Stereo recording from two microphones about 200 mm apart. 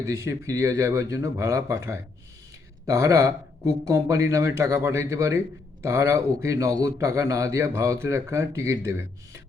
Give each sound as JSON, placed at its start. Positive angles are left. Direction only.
{"t": 0.0, "sound": "a man's voice", "side_deg": -15}